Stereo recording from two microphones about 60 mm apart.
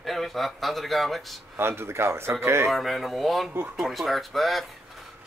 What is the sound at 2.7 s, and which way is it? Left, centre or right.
Speech, centre.